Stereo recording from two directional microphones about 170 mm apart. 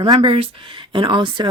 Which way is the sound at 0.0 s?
30° right (ahead or behind).